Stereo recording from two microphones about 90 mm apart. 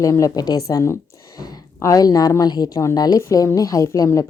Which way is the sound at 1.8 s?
40° left (ahead or behind).